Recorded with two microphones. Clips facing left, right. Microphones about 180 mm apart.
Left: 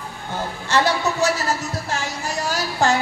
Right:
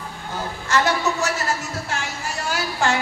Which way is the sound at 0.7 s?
30° left (ahead or behind).